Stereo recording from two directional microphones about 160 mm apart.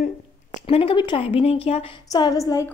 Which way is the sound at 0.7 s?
35° left (ahead or behind).